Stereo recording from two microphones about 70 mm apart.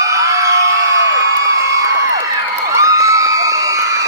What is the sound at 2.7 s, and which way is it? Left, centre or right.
Crowd, right.